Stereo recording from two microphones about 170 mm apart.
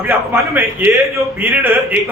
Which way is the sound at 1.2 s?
10° right (ahead or behind).